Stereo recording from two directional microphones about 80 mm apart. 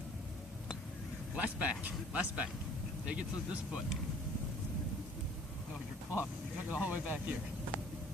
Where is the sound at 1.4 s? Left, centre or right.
Centre.